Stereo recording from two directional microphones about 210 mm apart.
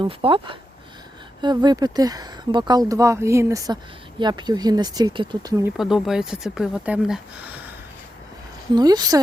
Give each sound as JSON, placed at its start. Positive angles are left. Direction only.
{"t": 0.0, "sound": "speech", "side_deg": -25}
{"t": 5.7, "sound": "speech", "side_deg": 0}
{"t": 8.7, "sound": "speech", "side_deg": -20}